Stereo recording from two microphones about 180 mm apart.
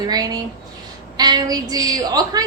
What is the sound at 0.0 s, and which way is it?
A woman's voice, 20° right (ahead or behind).